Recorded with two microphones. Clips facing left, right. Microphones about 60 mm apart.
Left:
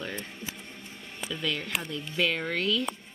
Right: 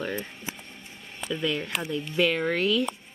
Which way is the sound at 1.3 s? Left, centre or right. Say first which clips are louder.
Right 3 dB; centre.